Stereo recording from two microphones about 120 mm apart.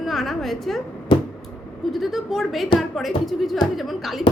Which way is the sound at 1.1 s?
40° left (ahead or behind).